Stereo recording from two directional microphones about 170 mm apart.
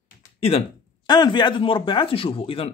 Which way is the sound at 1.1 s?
25° left (ahead or behind).